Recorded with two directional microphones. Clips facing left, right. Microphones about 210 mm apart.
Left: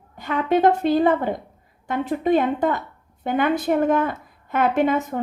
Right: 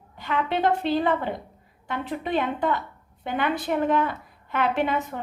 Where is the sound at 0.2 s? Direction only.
45° left (ahead or behind).